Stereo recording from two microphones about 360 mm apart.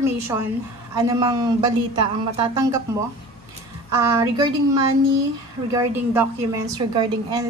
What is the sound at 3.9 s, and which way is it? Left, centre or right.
A woman's voice, centre.